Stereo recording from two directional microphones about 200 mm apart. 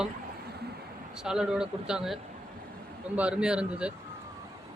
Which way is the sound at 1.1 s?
5° right (ahead or behind).